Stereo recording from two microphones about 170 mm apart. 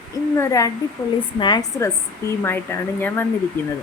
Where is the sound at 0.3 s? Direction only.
20° left (ahead or behind).